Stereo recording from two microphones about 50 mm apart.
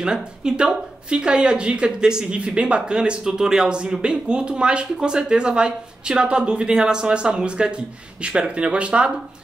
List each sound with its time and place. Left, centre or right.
0.0 s a woman's voice: centre